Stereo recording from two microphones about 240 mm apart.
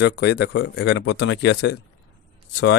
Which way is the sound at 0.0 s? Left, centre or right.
Left.